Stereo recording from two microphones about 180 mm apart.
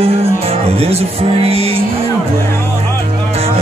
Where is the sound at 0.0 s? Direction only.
35° right (ahead or behind).